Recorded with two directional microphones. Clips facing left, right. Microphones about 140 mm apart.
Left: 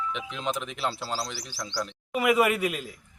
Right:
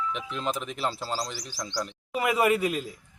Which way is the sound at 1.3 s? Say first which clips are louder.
Even; 40° right (ahead or behind).